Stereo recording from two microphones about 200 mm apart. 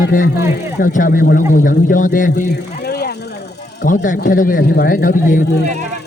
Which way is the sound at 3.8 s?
40° left (ahead or behind).